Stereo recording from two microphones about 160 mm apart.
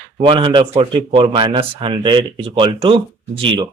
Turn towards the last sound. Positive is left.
turn(degrees=-30)  # may be behind; listen again after turning